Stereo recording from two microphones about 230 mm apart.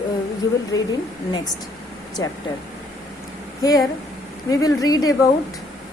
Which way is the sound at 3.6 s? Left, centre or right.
Centre.